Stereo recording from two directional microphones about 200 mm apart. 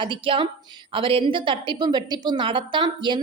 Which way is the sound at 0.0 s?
25° right (ahead or behind).